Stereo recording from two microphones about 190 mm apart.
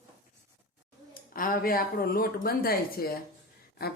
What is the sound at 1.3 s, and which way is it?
Speech, 50° left (ahead or behind).